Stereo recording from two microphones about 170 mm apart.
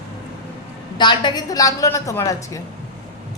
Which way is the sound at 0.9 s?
25° left (ahead or behind).